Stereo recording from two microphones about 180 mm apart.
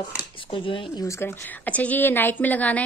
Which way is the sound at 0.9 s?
15° left (ahead or behind).